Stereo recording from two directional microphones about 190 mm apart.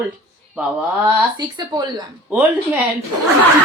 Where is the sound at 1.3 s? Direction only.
20° right (ahead or behind).